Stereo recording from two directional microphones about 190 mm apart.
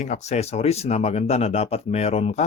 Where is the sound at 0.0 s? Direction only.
35° left (ahead or behind).